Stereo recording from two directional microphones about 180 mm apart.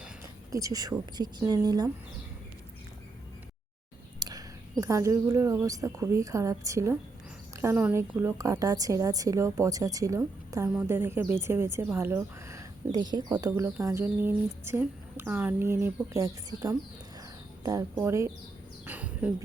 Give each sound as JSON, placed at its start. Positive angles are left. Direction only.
{"t": 0.5, "sound": "speech", "side_deg": -20}
{"t": 4.2, "sound": "a woman's voice", "side_deg": -20}
{"t": 13.5, "sound": "a woman's voice", "side_deg": -10}
{"t": 18.9, "sound": "a sound", "side_deg": -10}